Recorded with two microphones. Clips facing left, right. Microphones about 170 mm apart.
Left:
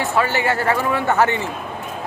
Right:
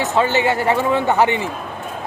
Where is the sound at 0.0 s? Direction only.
20° right (ahead or behind).